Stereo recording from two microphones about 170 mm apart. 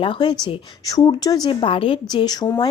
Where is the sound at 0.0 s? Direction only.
30° left (ahead or behind).